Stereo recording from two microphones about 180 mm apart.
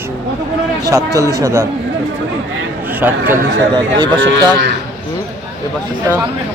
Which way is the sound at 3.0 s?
10° right (ahead or behind).